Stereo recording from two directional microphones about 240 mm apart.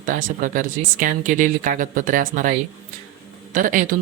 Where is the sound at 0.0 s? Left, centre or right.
Right.